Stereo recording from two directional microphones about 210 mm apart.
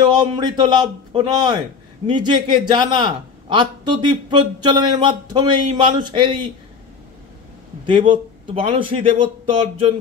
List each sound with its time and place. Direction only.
0.0 s a man's voice: 20° right (ahead or behind)
7.8 s a man's voice: 25° right (ahead or behind)